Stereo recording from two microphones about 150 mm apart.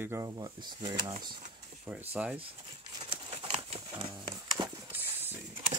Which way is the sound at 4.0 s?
30° right (ahead or behind).